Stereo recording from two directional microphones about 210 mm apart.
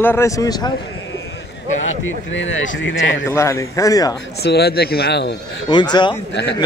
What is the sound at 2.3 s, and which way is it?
Speech, 65° left (ahead or behind).